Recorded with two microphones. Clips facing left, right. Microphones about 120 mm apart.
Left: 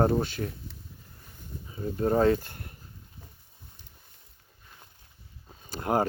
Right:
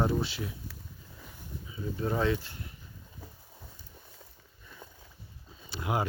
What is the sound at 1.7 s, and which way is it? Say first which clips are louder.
Speech: left 6 dB; 45° left (ahead or behind).